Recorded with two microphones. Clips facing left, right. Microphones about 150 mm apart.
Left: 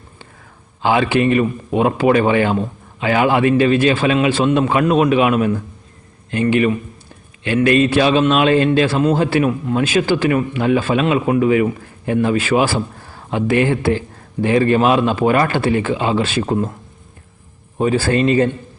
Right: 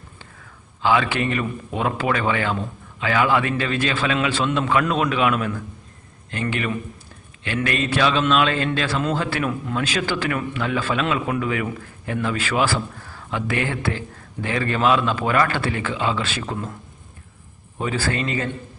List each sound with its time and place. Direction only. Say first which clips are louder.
0.8 s speech: left 5 dB; 25° left (ahead or behind)
16.4 s speech: left 10 dB; 35° left (ahead or behind)
17.7 s speech: left 9 dB; 25° left (ahead or behind)